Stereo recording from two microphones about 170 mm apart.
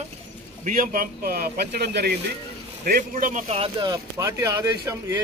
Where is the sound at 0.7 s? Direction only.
50° right (ahead or behind); by 2.1 s 70° right (ahead or behind).